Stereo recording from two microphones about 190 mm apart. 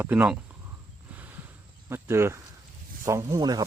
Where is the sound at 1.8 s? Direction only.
15° right (ahead or behind).